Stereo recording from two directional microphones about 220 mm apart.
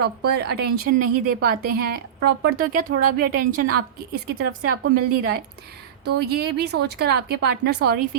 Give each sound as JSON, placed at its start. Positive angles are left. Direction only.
{"t": 0.3, "sound": "a woman's voice", "side_deg": -45}